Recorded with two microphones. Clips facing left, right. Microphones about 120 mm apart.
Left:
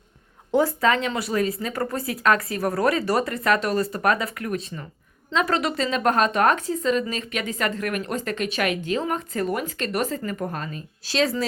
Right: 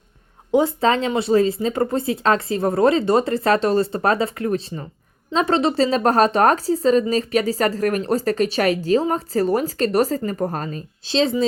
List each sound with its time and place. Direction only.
0.5 s speech: 25° right (ahead or behind)
11.0 s speech: 25° right (ahead or behind)